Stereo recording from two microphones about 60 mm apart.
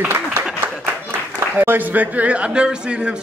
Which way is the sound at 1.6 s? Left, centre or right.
Right.